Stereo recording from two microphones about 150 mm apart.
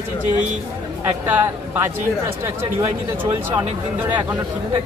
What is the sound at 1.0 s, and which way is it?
Speech, 15° right (ahead or behind).